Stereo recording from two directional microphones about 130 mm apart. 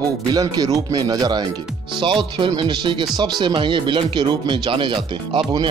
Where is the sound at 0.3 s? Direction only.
30° right (ahead or behind).